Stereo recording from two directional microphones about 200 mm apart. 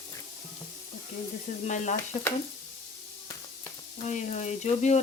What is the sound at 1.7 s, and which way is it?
Speech, 35° left (ahead or behind).